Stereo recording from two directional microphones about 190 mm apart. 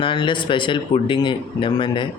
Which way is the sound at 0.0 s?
25° left (ahead or behind).